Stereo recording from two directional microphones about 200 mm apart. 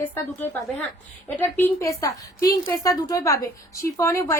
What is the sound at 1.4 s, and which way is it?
A woman's voice, 10° left (ahead or behind).